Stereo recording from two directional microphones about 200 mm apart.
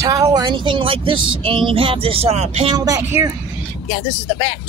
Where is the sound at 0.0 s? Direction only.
15° right (ahead or behind).